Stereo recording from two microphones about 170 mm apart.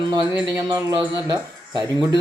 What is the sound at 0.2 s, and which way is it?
Speech, 5° right (ahead or behind).